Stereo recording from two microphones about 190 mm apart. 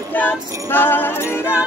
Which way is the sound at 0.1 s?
10° left (ahead or behind).